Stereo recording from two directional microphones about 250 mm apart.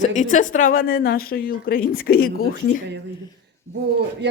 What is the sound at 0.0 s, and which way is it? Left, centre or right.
A woman's voice, left.